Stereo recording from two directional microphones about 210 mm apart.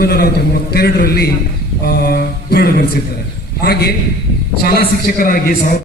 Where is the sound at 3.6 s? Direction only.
50° left (ahead or behind).